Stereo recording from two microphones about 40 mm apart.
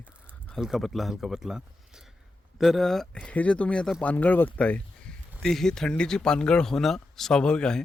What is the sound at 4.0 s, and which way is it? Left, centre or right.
Speech, left.